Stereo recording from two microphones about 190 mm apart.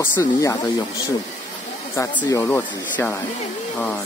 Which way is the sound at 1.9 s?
15° left (ahead or behind).